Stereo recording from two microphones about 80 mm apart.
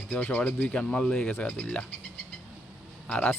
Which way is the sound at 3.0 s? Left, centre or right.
Centre.